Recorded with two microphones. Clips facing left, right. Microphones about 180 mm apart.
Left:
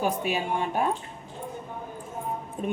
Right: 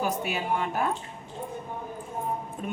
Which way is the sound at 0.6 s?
30° left (ahead or behind).